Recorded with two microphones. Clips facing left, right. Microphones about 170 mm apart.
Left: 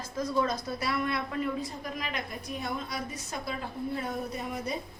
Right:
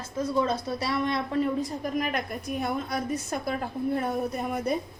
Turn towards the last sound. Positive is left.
turn(degrees=-55)  # may be behind; listen again after turning